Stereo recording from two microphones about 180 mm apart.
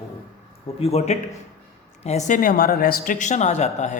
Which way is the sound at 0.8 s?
35° left (ahead or behind).